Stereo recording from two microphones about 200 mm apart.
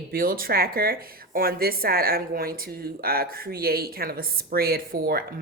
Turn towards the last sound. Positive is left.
turn(degrees=-50)  # may be behind; listen again after turning